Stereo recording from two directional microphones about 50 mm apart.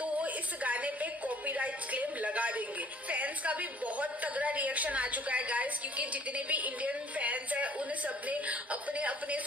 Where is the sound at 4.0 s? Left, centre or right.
Right.